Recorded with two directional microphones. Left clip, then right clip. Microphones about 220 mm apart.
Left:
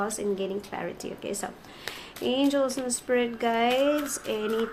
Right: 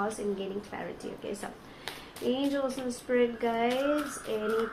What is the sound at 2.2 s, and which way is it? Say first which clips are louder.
Speech: left 5 dB; 50° left (ahead or behind).